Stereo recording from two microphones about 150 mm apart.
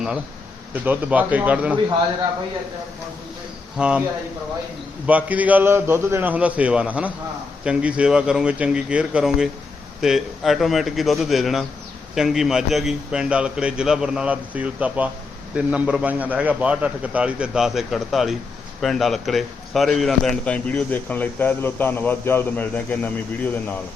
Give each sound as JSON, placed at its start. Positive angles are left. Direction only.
{"t": 0.9, "sound": "a man's voice", "side_deg": -10}
{"t": 3.8, "sound": "a man's voice", "side_deg": -5}
{"t": 5.0, "sound": "a man's voice", "side_deg": -10}